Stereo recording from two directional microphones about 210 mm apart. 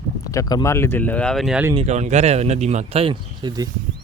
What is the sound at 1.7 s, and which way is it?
Speech, 30° right (ahead or behind).